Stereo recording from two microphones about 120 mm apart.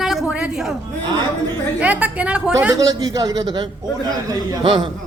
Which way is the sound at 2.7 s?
30° right (ahead or behind).